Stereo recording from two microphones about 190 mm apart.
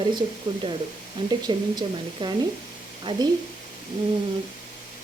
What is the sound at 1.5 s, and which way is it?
Speech, 25° right (ahead or behind).